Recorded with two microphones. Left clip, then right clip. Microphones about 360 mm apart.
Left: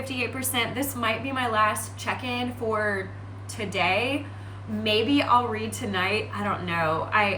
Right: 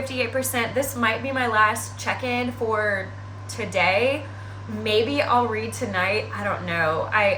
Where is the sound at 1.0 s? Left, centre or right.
Centre.